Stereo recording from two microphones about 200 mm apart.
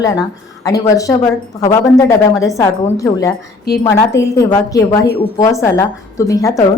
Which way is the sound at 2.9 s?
15° left (ahead or behind).